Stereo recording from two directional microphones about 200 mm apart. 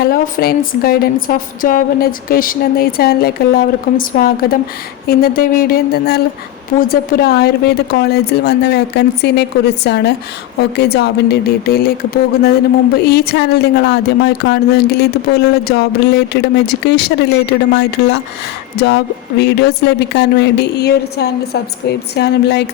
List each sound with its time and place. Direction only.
0.0 s a woman's voice: 50° left (ahead or behind)